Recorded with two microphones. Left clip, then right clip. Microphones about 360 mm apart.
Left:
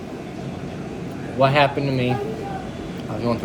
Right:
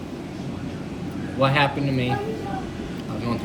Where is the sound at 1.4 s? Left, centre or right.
Centre.